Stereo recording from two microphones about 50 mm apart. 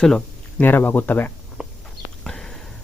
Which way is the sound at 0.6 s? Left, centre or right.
Left.